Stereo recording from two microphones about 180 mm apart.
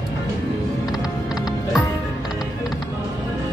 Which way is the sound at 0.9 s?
5° right (ahead or behind).